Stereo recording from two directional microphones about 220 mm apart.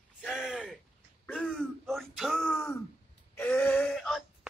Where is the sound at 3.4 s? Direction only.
5° left (ahead or behind).